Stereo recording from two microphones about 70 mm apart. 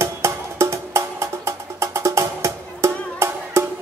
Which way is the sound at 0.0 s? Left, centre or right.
Right.